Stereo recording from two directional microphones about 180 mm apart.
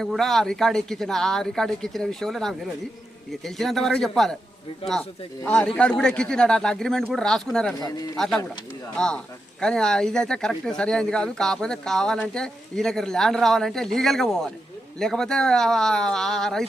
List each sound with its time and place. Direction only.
0.0 s speech: centre (ahead or behind)
5.4 s speech: 5° left (ahead or behind)
7.8 s speech: 20° left (ahead or behind)
8.1 s speech: centre (ahead or behind)